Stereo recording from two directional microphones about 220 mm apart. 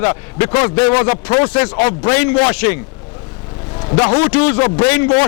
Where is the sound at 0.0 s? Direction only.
20° left (ahead or behind).